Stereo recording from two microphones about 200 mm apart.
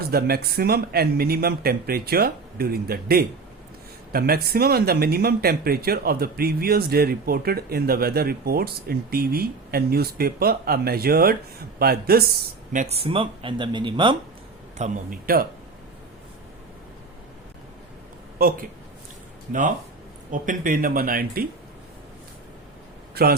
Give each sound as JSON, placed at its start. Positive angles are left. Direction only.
{"t": 0.0, "sound": "speech", "side_deg": -50}
{"t": 12.7, "sound": "speech", "side_deg": -35}
{"t": 14.8, "sound": "speech", "side_deg": -45}
{"t": 18.3, "sound": "speech", "side_deg": -45}
{"t": 20.3, "sound": "speech", "side_deg": -40}
{"t": 23.1, "sound": "a man's voice", "side_deg": -50}